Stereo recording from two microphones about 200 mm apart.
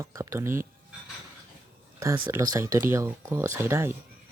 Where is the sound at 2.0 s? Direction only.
15° right (ahead or behind).